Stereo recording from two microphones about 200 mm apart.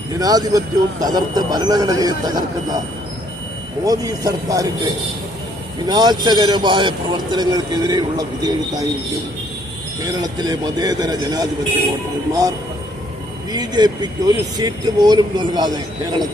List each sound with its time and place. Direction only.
0.2 s speech: 20° right (ahead or behind)
3.8 s speech: 20° right (ahead or behind)
10.1 s speech: 20° right (ahead or behind)